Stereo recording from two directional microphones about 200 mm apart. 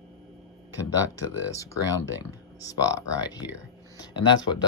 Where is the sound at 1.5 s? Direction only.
15° left (ahead or behind).